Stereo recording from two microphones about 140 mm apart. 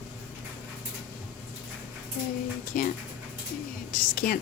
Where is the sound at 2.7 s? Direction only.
70° left (ahead or behind).